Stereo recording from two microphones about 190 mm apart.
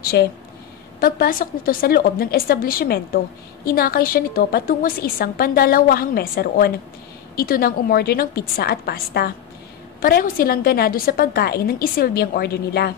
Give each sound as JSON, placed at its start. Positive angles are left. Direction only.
{"t": 0.0, "sound": "a woman's voice", "side_deg": 55}